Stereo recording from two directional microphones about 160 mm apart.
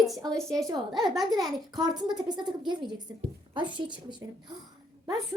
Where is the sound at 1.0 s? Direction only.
Centre (ahead or behind).